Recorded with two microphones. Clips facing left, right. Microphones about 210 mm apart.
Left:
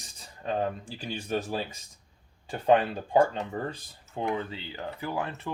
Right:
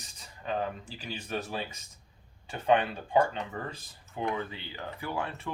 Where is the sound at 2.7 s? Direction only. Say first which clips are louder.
Left 3 dB; 35° left (ahead or behind).